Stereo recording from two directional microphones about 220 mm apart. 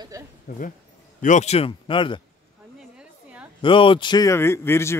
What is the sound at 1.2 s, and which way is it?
Speech, 35° left (ahead or behind).